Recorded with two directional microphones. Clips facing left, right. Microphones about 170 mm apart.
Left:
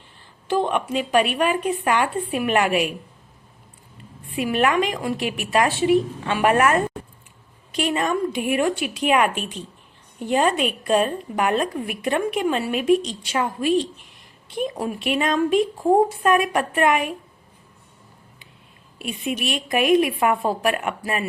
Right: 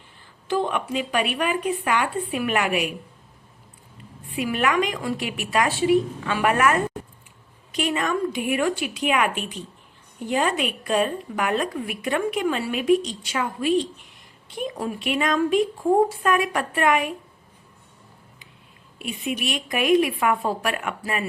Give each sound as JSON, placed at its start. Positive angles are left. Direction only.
{"t": 0.4, "sound": "a sound", "side_deg": 20}
{"t": 1.4, "sound": "speech", "side_deg": 25}
{"t": 4.4, "sound": "speech", "side_deg": 25}
{"t": 7.9, "sound": "speech", "side_deg": 25}
{"t": 19.4, "sound": "speech", "side_deg": 25}